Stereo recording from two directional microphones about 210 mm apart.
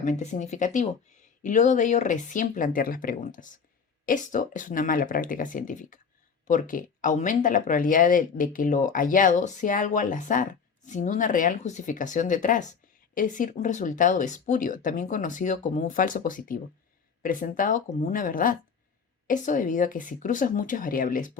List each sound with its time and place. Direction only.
0.0 s speech: 35° left (ahead or behind)